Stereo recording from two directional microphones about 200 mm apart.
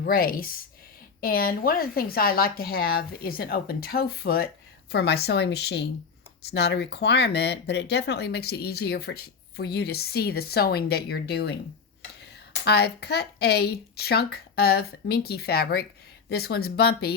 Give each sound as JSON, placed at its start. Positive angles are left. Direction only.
{"t": 0.0, "sound": "speech", "side_deg": 45}
{"t": 12.6, "sound": "speech", "side_deg": 55}